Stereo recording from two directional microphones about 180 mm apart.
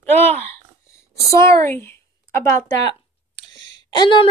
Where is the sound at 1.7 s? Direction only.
15° left (ahead or behind).